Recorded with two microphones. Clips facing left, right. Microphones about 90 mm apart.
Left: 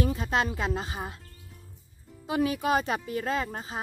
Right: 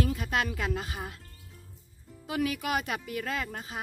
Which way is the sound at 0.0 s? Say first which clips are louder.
Left 2 dB; 25° left (ahead or behind).